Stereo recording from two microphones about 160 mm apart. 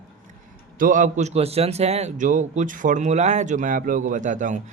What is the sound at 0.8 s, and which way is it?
A man's voice, 55° right (ahead or behind).